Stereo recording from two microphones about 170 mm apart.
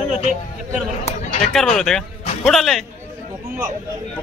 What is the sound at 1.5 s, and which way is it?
Speech, centre (ahead or behind).